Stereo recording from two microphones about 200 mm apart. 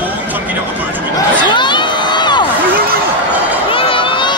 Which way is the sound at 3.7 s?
25° left (ahead or behind).